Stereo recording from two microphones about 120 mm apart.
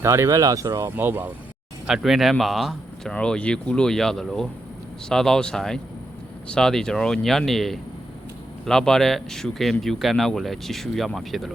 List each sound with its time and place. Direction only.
0.0 s speech: 20° right (ahead or behind)
1.9 s speech: centre (ahead or behind)